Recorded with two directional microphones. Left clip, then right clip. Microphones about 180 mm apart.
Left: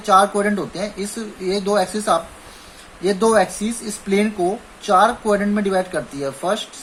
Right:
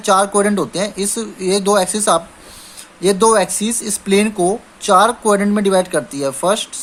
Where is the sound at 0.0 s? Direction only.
55° right (ahead or behind).